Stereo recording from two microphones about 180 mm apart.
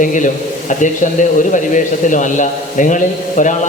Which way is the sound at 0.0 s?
45° left (ahead or behind).